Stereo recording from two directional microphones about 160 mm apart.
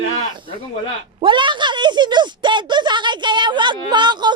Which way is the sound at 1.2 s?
30° right (ahead or behind).